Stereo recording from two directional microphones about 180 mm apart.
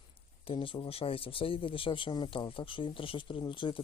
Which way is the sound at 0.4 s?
30° left (ahead or behind).